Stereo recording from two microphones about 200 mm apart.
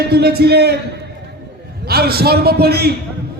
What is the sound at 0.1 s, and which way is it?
Speech, 50° right (ahead or behind).